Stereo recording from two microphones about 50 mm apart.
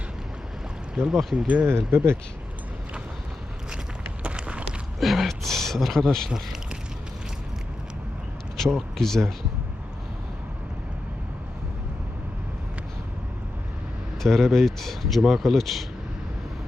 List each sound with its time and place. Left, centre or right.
1.2 s speech: centre
1.6 s speech: right
4.2 s a sound: right
4.9 s speech: centre
8.5 s speech: centre
14.2 s speech: centre